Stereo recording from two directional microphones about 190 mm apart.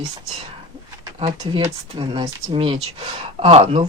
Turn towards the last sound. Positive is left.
turn(degrees=-30)  # may be behind; listen again after turning